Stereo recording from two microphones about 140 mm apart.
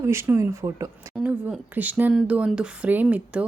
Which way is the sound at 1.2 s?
10° right (ahead or behind).